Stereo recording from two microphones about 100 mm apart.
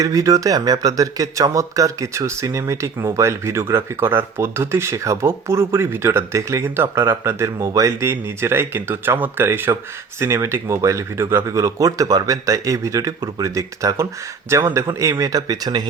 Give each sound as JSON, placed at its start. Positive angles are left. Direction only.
{"t": 0.0, "sound": "speech", "side_deg": -35}